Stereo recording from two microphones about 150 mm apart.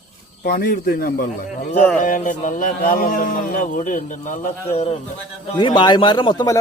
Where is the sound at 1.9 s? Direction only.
60° left (ahead or behind).